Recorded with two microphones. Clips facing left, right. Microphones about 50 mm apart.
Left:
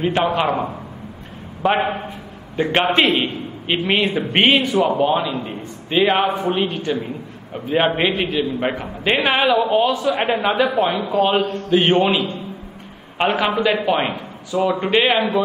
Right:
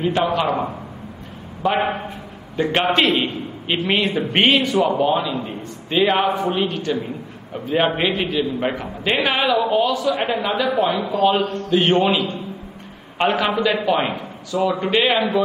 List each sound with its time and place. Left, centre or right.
0.0 s a man's voice: left
1.6 s a man's voice: left
9.6 s a man's voice: left
13.2 s a man's voice: centre